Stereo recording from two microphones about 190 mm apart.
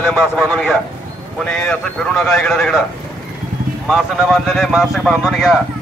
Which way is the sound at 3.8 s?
Centre (ahead or behind).